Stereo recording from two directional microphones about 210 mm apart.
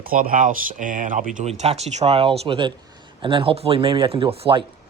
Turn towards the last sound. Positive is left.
turn(degrees=-25)  # may be behind; listen again after turning